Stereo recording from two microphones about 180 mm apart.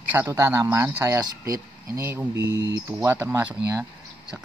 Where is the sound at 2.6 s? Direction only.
90° right.